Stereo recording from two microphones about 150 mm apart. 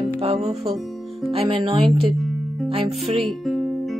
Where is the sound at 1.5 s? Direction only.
35° right (ahead or behind).